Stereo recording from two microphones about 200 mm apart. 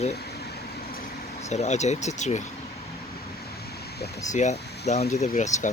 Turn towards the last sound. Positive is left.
turn(degrees=35)  # may be behind; listen again after turning